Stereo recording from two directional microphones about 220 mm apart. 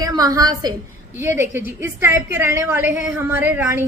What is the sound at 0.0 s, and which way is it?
A woman's voice, 15° right (ahead or behind).